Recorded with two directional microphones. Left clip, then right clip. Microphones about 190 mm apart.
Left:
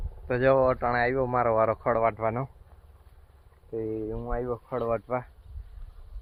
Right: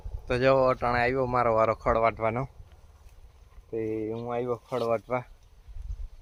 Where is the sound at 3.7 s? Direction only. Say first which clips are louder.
Right 1 dB; 20° right (ahead or behind).